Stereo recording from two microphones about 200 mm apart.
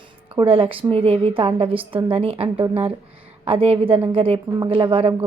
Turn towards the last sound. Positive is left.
turn(degrees=-25)  # may be behind; listen again after turning